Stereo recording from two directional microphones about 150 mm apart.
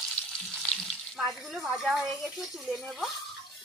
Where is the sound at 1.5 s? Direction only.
20° right (ahead or behind).